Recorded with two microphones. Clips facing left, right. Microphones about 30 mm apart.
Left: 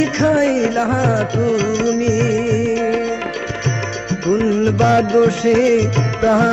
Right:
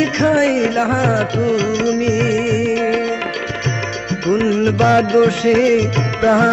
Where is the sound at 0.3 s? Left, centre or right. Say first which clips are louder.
Even; right.